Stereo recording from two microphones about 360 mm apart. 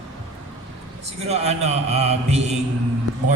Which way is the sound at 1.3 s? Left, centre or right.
Centre.